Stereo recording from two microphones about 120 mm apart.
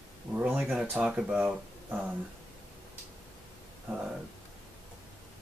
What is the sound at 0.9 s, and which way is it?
Speech, 10° right (ahead or behind).